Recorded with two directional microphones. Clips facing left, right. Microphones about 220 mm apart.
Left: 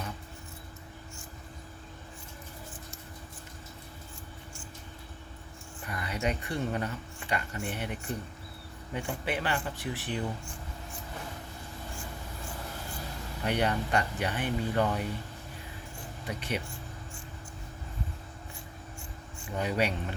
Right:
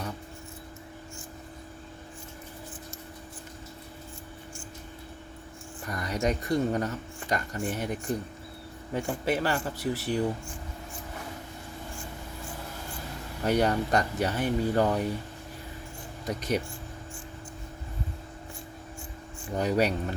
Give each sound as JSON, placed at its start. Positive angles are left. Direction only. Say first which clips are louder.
{"t": 5.8, "sound": "speech", "louder": "right 4 dB", "side_deg": -40}
{"t": 13.4, "sound": "speech", "louder": "right 5 dB", "side_deg": -40}
{"t": 16.2, "sound": "speech", "louder": "right 6 dB", "side_deg": -40}
{"t": 19.5, "sound": "speech", "louder": "right 4 dB", "side_deg": -40}